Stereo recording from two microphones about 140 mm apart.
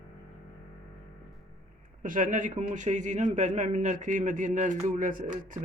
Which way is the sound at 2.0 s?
70° right (ahead or behind).